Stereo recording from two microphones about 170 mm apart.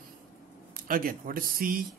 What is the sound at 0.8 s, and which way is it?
Speech, 55° right (ahead or behind).